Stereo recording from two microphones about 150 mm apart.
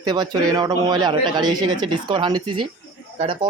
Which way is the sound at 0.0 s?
25° right (ahead or behind).